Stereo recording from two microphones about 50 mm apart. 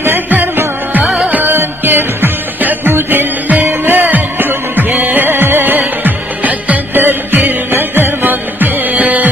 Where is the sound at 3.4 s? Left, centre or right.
Right.